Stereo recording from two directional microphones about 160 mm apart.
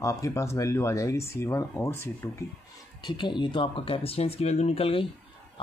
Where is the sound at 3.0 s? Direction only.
30° left (ahead or behind).